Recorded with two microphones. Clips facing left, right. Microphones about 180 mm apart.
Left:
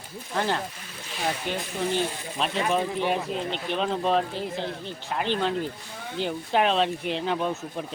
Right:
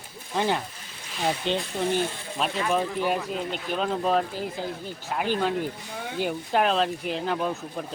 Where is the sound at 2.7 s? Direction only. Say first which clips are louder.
Right 1 dB; centre (ahead or behind).